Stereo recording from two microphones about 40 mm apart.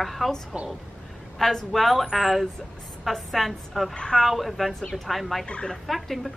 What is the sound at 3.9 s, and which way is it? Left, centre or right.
Speech, left.